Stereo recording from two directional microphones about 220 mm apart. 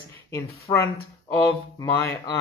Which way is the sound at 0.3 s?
15° left (ahead or behind).